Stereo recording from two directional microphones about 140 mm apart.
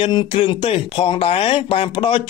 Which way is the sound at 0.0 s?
40° left (ahead or behind).